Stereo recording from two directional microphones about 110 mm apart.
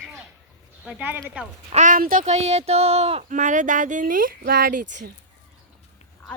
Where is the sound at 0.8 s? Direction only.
15° right (ahead or behind).